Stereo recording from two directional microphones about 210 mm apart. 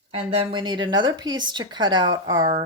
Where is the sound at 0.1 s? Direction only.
30° right (ahead or behind).